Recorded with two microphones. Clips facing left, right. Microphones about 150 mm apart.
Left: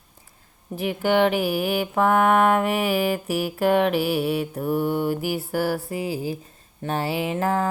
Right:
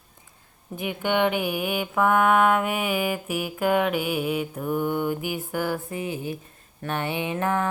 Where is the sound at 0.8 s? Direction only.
35° left (ahead or behind).